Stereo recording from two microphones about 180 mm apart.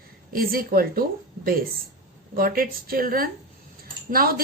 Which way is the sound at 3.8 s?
55° right (ahead or behind).